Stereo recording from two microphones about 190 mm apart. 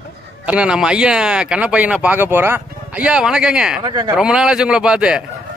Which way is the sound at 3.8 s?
20° right (ahead or behind).